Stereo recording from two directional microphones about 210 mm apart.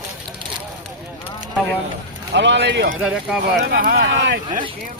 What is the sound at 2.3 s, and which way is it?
Speech, 55° right (ahead or behind).